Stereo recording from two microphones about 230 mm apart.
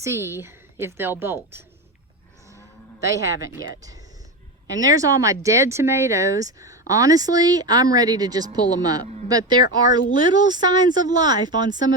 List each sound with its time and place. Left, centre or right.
0.0 s speech: centre
3.1 s speech: centre
4.9 s speech: centre
9.4 s speech: left
10.2 s speech: centre